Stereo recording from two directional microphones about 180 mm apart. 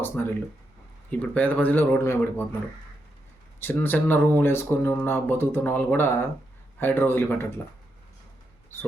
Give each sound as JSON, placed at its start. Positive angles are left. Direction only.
{"t": 0.0, "sound": "speech", "side_deg": 10}
{"t": 3.6, "sound": "speech", "side_deg": 10}